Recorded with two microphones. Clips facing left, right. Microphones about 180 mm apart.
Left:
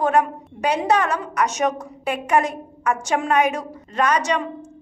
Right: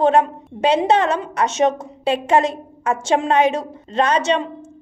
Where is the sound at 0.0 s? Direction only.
25° right (ahead or behind).